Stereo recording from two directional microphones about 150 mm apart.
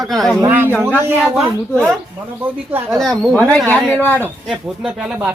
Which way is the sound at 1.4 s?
5° left (ahead or behind).